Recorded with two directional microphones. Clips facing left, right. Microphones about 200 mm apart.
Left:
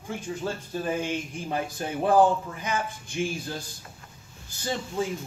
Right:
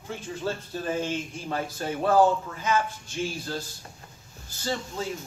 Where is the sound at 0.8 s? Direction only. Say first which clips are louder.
Even; 15° left (ahead or behind).